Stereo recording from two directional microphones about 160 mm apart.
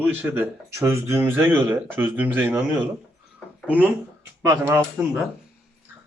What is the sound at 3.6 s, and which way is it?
Speech, 10° right (ahead or behind).